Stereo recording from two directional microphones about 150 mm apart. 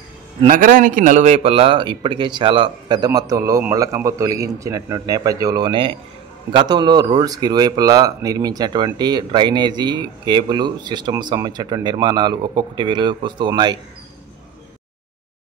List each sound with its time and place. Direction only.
0.5 s speech: 65° right (ahead or behind); by 13.7 s 30° right (ahead or behind)